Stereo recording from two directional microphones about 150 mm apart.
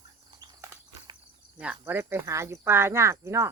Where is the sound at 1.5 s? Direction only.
10° right (ahead or behind).